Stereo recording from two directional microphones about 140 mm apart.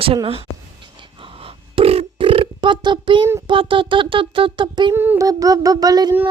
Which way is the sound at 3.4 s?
40° right (ahead or behind).